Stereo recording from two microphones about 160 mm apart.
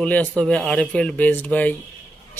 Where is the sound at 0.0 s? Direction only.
10° left (ahead or behind).